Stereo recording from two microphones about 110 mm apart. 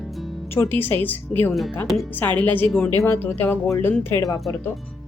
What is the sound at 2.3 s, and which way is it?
Speech, 15° left (ahead or behind).